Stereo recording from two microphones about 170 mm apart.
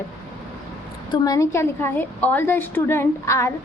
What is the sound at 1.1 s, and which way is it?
A woman's voice, 20° left (ahead or behind).